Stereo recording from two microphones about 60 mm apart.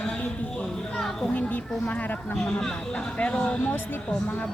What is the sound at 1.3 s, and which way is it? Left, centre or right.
A man's voice, left.